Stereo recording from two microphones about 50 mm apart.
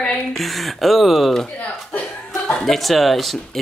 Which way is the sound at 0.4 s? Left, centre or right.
Centre.